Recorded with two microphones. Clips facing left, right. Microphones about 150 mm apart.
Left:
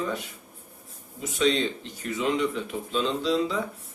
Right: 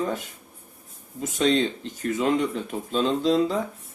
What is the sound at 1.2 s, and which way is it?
A man's voice, 45° right (ahead or behind).